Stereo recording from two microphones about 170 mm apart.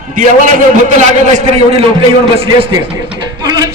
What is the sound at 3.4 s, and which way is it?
Music, 25° right (ahead or behind).